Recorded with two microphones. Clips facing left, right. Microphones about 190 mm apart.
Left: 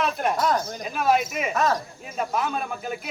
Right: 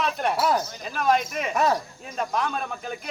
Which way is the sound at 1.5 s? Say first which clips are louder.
Right 1 dB; 15° right (ahead or behind).